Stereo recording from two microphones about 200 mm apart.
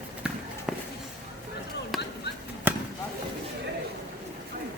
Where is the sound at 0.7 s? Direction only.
5° right (ahead or behind).